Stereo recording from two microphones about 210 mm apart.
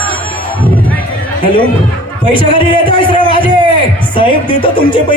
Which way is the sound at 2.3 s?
25° left (ahead or behind).